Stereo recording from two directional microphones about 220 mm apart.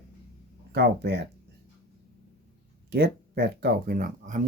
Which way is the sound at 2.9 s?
45° right (ahead or behind).